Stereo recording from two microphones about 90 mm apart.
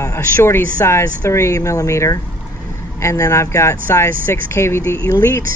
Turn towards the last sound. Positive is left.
turn(degrees=30)  # may be behind; listen again after turning